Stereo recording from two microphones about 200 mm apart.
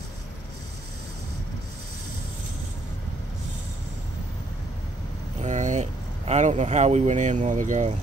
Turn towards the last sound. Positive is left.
turn(degrees=-40)  # may be behind; listen again after turning